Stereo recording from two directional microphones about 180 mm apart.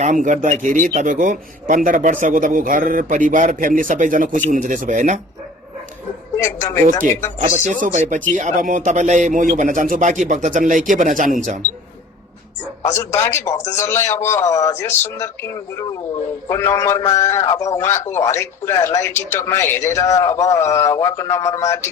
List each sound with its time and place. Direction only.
0.0 s a man's voice: 45° right (ahead or behind)
7.3 s a man's voice: 40° right (ahead or behind)
12.8 s a man's voice: 15° left (ahead or behind)